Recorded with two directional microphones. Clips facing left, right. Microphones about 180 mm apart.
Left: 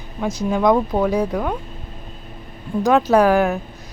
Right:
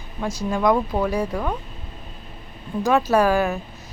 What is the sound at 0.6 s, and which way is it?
Speech, 20° left (ahead or behind).